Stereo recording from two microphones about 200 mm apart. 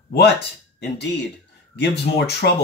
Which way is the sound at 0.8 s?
55° left (ahead or behind).